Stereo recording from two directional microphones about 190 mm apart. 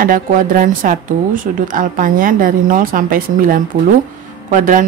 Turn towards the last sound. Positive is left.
turn(degrees=-45)  # may be behind; listen again after turning